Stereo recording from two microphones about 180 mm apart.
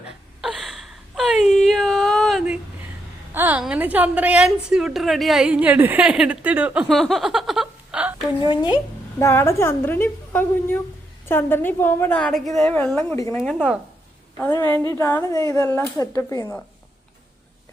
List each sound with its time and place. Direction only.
0.0 s whimper: 5° right (ahead or behind)
3.3 s a woman's voice: 10° right (ahead or behind)
6.8 s a sound: centre (ahead or behind)
8.4 s a woman's voice: 25° left (ahead or behind)
13.4 s a woman's voice: 5° left (ahead or behind)